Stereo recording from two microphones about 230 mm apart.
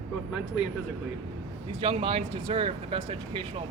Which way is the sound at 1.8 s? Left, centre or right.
Right.